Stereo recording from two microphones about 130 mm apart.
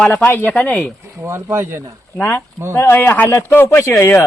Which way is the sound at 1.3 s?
20° right (ahead or behind).